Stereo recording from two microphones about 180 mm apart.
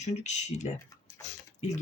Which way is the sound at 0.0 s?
40° left (ahead or behind).